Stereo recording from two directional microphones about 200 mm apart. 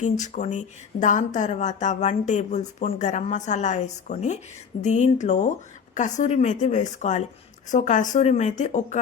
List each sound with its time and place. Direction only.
0.0 s a woman's voice: 40° left (ahead or behind)